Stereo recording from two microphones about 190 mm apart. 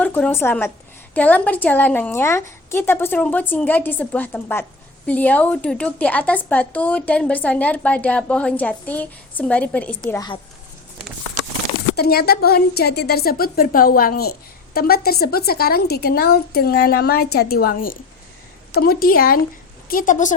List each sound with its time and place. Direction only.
0.0 s a woman's voice: 10° left (ahead or behind)
10.1 s a woman's voice: 20° left (ahead or behind)
11.9 s a woman's voice: 55° left (ahead or behind)